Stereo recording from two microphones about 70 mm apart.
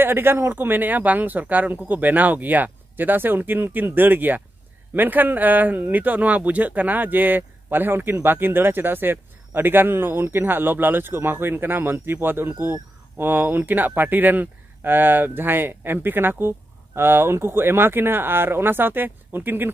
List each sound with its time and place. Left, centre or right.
0.0 s speech: right